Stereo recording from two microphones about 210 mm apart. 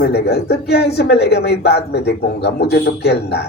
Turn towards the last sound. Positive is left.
turn(degrees=50)  # may be behind; listen again after turning